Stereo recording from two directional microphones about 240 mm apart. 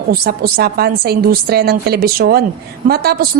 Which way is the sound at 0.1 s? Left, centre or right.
Right.